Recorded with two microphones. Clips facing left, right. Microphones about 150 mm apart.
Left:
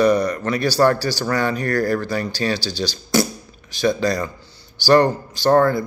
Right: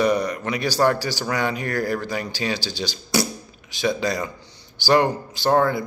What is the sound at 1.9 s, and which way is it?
Speech, 15° right (ahead or behind).